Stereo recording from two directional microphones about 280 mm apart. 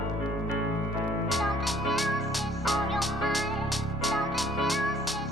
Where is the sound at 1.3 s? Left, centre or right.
Centre.